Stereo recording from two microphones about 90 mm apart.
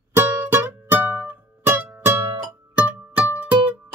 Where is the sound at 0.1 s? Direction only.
20° right (ahead or behind).